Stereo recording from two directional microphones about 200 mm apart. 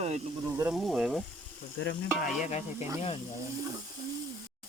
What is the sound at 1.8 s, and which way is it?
Stir, 60° left (ahead or behind).